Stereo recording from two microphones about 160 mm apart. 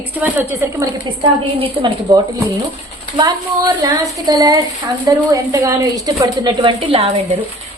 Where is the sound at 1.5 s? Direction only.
35° right (ahead or behind).